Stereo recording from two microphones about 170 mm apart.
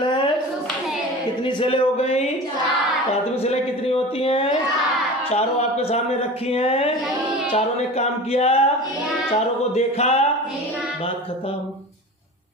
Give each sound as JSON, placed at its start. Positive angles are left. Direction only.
{"t": 1.5, "sound": "speech", "side_deg": 30}
{"t": 3.4, "sound": "speech", "side_deg": 35}